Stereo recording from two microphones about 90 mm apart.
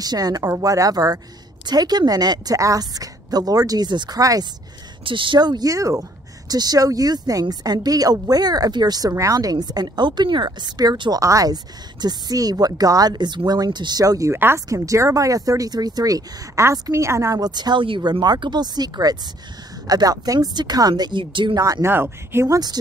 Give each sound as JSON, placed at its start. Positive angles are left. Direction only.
{"t": 0.0, "sound": "speech", "side_deg": -45}
{"t": 4.2, "sound": "speech", "side_deg": -40}
{"t": 5.0, "sound": "speech", "side_deg": -70}
{"t": 14.0, "sound": "speech", "side_deg": -35}
{"t": 17.4, "sound": "speech", "side_deg": -50}
{"t": 21.8, "sound": "speech", "side_deg": -25}